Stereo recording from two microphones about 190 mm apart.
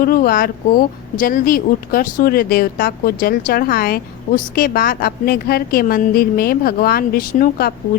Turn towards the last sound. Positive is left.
turn(degrees=50)  # may be behind; listen again after turning